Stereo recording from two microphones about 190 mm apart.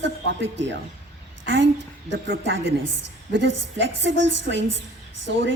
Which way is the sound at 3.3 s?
75° right (ahead or behind).